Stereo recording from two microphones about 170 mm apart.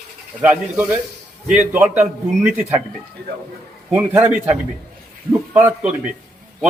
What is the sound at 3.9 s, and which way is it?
A man's voice, 15° right (ahead or behind).